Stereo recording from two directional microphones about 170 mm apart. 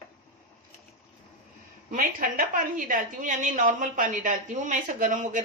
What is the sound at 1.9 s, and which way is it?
A woman's voice, 55° right (ahead or behind).